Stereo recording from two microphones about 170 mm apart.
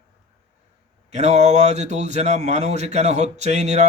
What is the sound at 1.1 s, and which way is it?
Speech, 40° right (ahead or behind).